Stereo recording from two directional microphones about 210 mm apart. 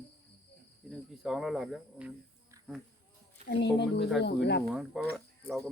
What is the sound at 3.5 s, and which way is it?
Speech, 55° left (ahead or behind).